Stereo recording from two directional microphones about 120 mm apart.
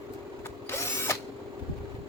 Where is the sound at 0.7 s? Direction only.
20° left (ahead or behind).